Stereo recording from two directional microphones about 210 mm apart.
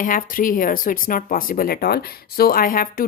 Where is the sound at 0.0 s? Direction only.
40° left (ahead or behind).